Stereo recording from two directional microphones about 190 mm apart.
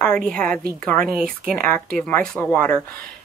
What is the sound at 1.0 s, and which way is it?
Speech, 50° right (ahead or behind).